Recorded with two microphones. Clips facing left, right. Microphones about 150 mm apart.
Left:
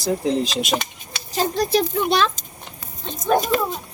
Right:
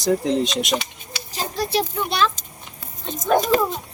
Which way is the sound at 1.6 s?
40° left (ahead or behind).